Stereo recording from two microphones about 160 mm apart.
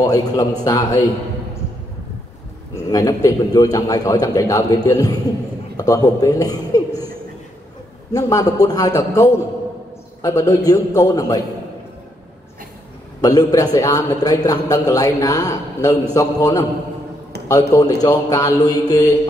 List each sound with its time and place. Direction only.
0.0 s a man's voice: 25° left (ahead or behind)
2.7 s a man's voice: 20° left (ahead or behind)
8.1 s a man's voice: 20° left (ahead or behind)
13.2 s a man's voice: 20° left (ahead or behind)